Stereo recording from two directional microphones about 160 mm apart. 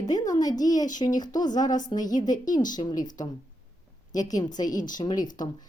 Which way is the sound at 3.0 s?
25° left (ahead or behind).